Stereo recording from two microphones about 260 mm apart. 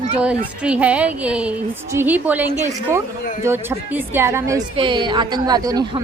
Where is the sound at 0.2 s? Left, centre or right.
Centre.